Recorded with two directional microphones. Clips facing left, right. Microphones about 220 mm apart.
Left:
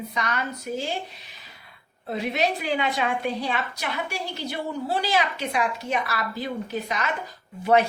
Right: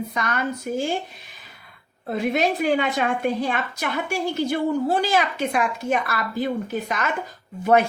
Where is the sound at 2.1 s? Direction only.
50° right (ahead or behind).